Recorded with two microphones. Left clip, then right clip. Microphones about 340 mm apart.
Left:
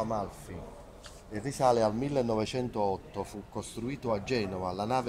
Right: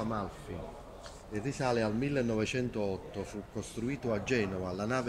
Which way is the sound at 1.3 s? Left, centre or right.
Centre.